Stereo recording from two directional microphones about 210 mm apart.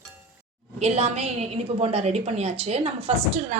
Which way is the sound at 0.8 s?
30° right (ahead or behind).